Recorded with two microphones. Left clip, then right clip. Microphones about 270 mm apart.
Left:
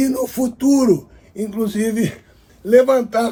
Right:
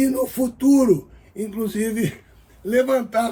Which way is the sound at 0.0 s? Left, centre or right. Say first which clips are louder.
Left 1 dB; centre.